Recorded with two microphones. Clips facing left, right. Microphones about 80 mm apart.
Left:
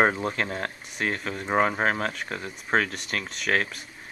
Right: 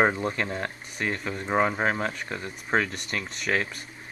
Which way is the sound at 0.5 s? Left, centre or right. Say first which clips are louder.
Even; centre.